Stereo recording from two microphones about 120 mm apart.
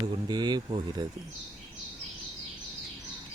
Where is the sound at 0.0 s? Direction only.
35° right (ahead or behind).